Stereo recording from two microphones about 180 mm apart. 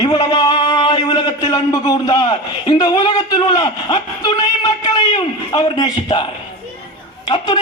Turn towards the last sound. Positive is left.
turn(degrees=25)  # may be behind; listen again after turning